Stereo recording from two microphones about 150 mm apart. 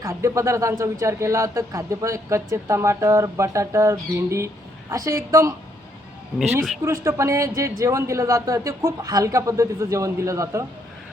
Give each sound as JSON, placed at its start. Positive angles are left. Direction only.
{"t": 0.0, "sound": "speech", "side_deg": -20}
{"t": 6.8, "sound": "speech", "side_deg": -20}